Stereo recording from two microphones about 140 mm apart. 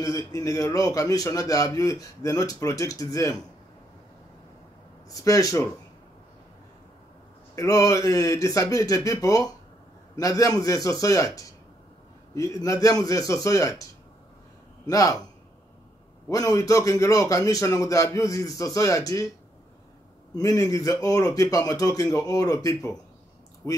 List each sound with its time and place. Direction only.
0.0 s a man's voice: 25° left (ahead or behind)
5.2 s a man's voice: 25° left (ahead or behind)
7.5 s a man's voice: 25° left (ahead or behind)
14.9 s a man's voice: 25° left (ahead or behind)
16.3 s a man's voice: 25° left (ahead or behind)
20.3 s a man's voice: 25° left (ahead or behind)